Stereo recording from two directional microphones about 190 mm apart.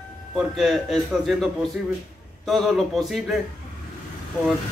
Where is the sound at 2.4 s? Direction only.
Centre (ahead or behind).